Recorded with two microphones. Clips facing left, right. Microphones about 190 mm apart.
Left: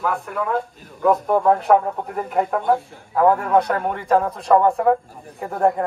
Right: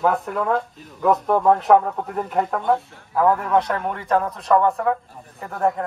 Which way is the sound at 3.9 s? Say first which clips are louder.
Left 3 dB; centre (ahead or behind).